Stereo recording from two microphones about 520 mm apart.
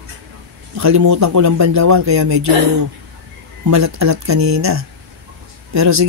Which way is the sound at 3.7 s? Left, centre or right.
Right.